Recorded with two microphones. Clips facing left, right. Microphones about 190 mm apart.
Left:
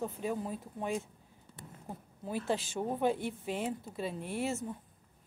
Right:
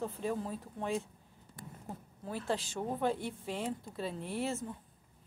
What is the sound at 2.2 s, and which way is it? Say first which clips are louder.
Speech: left 2 dB; 20° left (ahead or behind).